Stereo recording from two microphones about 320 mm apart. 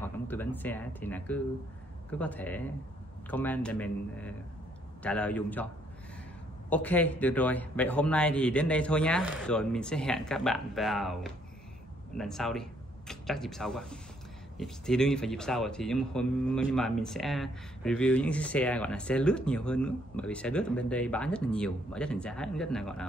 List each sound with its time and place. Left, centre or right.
0.0 s a man's voice: centre
6.7 s a man's voice: centre